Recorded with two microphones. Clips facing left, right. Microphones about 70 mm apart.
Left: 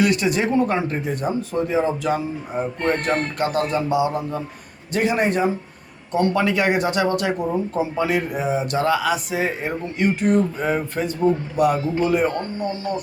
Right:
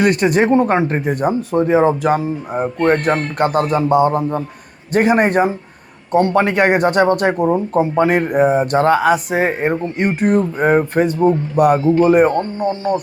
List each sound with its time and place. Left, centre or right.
0.0 s speech: right